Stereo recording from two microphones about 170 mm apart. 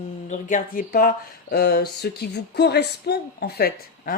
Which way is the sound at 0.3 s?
50° left (ahead or behind).